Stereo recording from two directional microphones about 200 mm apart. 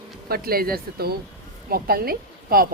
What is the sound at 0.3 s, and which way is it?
Speech, 50° right (ahead or behind).